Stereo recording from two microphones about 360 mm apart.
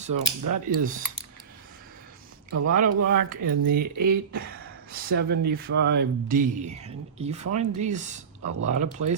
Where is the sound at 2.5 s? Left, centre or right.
Right.